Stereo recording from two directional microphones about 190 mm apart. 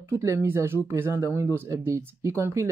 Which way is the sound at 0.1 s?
15° right (ahead or behind).